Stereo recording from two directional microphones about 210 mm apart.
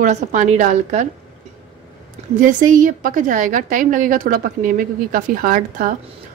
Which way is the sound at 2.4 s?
40° right (ahead or behind).